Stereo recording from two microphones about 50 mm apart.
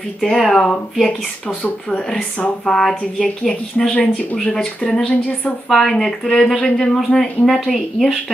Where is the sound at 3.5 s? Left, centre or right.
Left.